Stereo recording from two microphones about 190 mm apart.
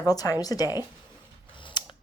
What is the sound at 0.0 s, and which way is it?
Speech, 20° left (ahead or behind).